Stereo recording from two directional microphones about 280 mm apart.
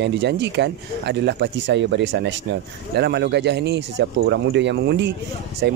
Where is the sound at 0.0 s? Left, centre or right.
Right.